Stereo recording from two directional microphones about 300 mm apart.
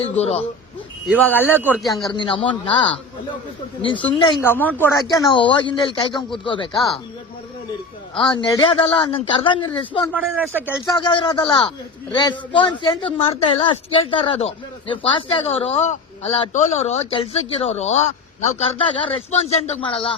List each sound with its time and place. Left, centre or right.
0.0 s speech: centre
1.1 s speech: centre
2.1 s speech: centre
8.1 s speech: centre
10.1 s speech: centre
10.8 s speech: centre